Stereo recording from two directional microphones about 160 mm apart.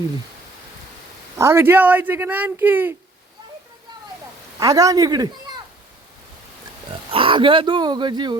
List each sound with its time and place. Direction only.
1.4 s speech: 15° right (ahead or behind)
4.6 s a man's voice: 20° right (ahead or behind)
7.1 s speech: 35° right (ahead or behind)